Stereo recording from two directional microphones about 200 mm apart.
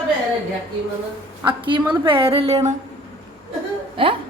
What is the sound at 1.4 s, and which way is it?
Speech, 25° right (ahead or behind).